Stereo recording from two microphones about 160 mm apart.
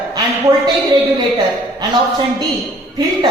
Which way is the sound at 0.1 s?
25° right (ahead or behind).